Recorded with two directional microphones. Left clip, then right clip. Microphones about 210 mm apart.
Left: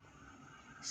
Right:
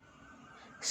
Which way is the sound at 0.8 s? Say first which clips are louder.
Right 8 dB; 35° right (ahead or behind).